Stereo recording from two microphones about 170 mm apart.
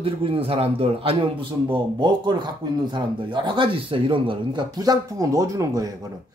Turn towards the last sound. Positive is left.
turn(degrees=-20)  # may be behind; listen again after turning